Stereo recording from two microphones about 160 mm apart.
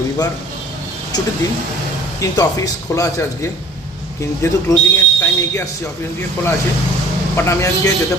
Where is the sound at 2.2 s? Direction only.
20° left (ahead or behind).